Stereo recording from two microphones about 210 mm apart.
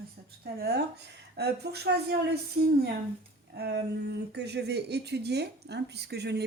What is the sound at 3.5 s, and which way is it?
Speech, 50° right (ahead or behind).